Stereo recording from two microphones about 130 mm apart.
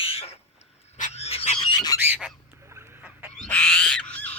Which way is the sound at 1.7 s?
30° left (ahead or behind).